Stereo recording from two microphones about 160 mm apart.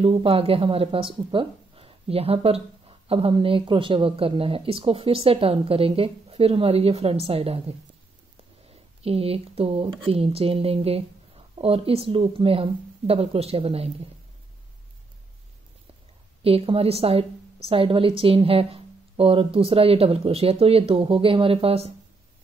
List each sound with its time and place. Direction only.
0.0 s speech: 35° right (ahead or behind)
9.0 s speech: 35° right (ahead or behind)
16.4 s speech: 35° right (ahead or behind)